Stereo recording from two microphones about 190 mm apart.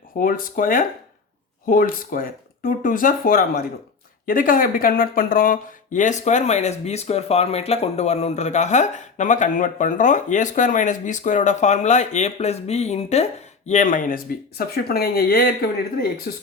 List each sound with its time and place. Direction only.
0.2 s speech: 45° left (ahead or behind)